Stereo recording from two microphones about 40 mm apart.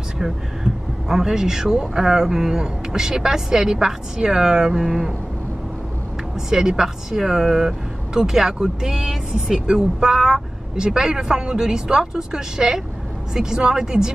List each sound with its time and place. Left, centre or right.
0.2 s speech: centre
6.3 s speech: centre